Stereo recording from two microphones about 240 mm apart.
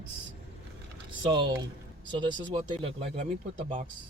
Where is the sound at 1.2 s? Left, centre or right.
Centre.